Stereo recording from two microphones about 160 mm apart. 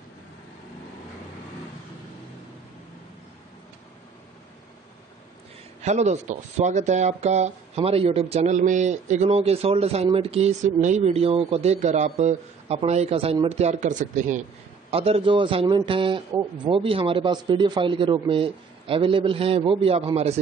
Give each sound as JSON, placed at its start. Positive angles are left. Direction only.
{"t": 5.8, "sound": "speech", "side_deg": -45}
{"t": 14.9, "sound": "a man's voice", "side_deg": -35}